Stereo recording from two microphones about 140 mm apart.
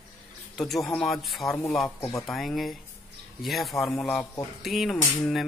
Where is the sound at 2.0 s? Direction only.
20° left (ahead or behind).